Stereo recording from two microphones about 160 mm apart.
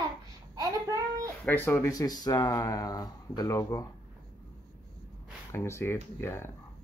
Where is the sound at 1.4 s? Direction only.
10° left (ahead or behind).